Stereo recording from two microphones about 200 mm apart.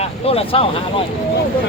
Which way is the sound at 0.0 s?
30° left (ahead or behind).